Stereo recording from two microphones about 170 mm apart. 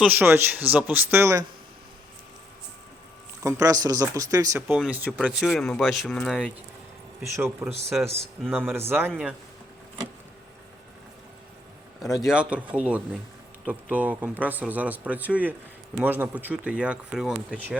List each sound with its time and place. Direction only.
0.0 s speech: 10° right (ahead or behind)
3.4 s speech: 20° right (ahead or behind); by 6.5 s centre (ahead or behind)
7.3 s speech: 15° right (ahead or behind)
12.1 s speech: 5° right (ahead or behind)